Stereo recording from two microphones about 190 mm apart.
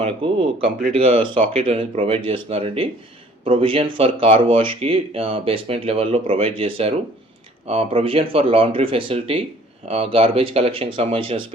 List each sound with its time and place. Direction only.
0.0 s speech: 30° right (ahead or behind)